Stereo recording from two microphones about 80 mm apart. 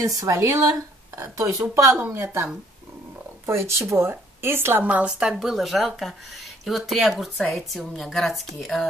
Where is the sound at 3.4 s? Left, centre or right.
Right.